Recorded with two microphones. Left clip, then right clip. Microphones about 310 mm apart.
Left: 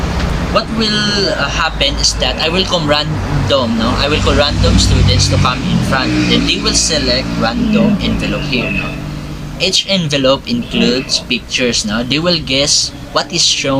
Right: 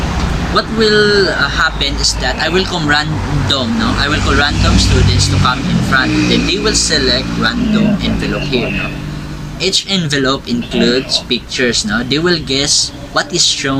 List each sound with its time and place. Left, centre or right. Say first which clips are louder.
0.5 s speech: right 4 dB; centre
9.6 s speech: left 1 dB; centre